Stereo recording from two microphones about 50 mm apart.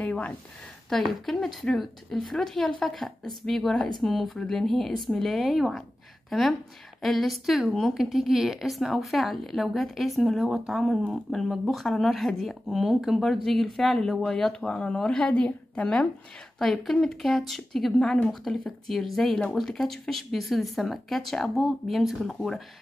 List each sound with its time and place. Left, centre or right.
0.0 s a sound: left
0.8 s speech: centre
15.3 s a woman's voice: left
15.8 s speech: centre
18.5 s speech: centre
18.9 s speech: centre